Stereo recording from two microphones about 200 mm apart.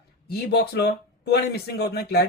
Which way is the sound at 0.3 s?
55° left (ahead or behind).